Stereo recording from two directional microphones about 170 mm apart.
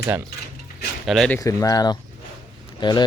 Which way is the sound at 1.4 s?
20° left (ahead or behind).